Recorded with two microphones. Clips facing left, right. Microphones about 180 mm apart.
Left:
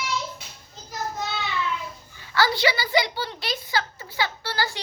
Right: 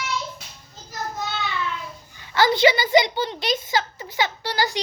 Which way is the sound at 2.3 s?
20° right (ahead or behind).